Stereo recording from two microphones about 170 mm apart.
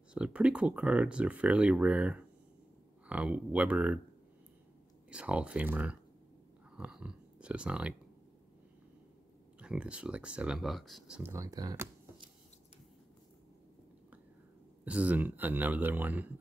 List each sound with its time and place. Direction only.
0.1 s speech: 5° right (ahead or behind)
5.1 s speech: 5° right (ahead or behind)
6.8 s a sound: 5° right (ahead or behind)
9.6 s speech: 5° right (ahead or behind)
11.3 s speech: 20° right (ahead or behind)
14.9 s speech: 10° right (ahead or behind)